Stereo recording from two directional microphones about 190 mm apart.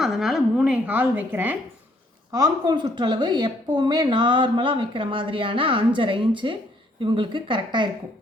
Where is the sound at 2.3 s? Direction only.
20° right (ahead or behind).